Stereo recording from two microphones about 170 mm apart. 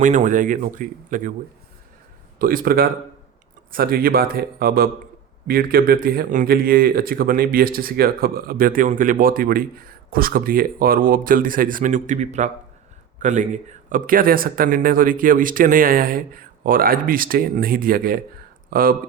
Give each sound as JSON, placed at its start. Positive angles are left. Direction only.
{"t": 0.0, "sound": "speech", "side_deg": -50}
{"t": 2.4, "sound": "speech", "side_deg": -55}